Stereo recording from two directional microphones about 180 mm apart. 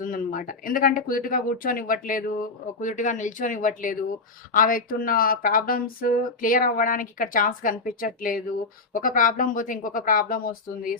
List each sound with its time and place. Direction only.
0.0 s speech: 50° left (ahead or behind)